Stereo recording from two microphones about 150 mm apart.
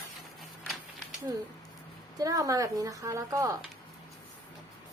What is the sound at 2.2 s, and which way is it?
A woman's voice, 25° right (ahead or behind).